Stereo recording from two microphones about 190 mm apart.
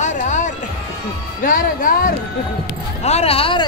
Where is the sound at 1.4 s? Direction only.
45° left (ahead or behind).